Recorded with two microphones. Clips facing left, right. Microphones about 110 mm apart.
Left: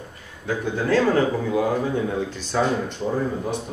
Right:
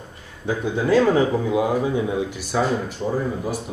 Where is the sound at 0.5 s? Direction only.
15° right (ahead or behind).